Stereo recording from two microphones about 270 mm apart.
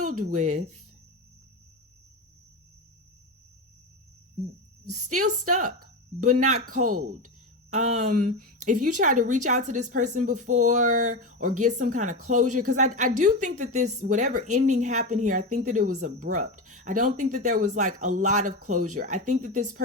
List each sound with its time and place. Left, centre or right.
0.3 s speech: right
4.9 s speech: right
5.8 s a sound: right
6.4 s speech: right
8.0 s speech: right